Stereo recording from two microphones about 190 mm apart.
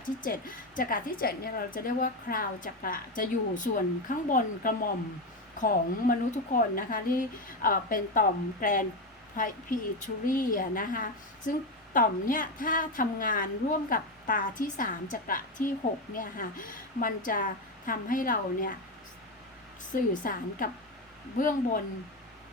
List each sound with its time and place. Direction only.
0.2 s a woman's voice: 45° left (ahead or behind)
19.9 s a woman's voice: 45° left (ahead or behind)